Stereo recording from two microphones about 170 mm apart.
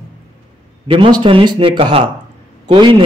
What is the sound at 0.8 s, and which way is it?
A man's voice, 30° right (ahead or behind).